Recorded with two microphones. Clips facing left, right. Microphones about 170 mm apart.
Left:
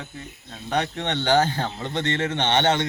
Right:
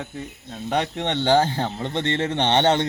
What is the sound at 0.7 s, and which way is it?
Speech, 25° right (ahead or behind).